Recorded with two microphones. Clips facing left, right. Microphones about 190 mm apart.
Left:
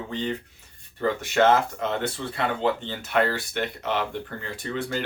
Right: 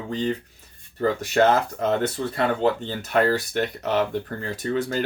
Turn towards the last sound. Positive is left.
turn(degrees=-40)  # may be behind; listen again after turning